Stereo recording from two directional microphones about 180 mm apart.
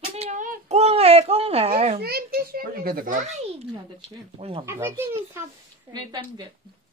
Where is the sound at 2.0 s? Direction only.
60° right (ahead or behind).